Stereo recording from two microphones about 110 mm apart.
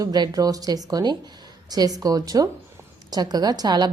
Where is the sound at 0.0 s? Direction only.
35° right (ahead or behind).